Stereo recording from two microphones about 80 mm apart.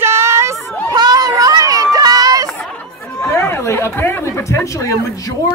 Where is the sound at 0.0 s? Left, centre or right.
Right.